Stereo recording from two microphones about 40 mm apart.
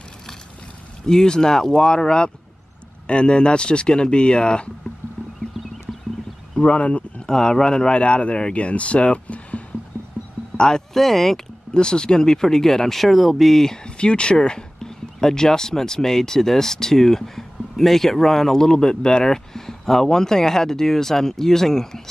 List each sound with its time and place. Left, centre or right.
1.0 s speech: centre
6.5 s speech: left
7.2 s speech: centre; by 9.6 s left
10.5 s music: left
10.9 s speech: centre
11.7 s speech: centre
13.8 s speech: left